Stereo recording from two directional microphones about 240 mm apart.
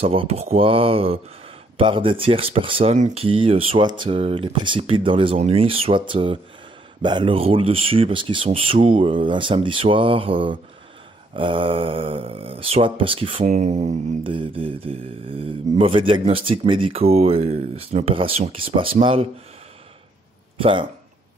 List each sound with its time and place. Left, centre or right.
0.0 s speech: right
20.5 s speech: right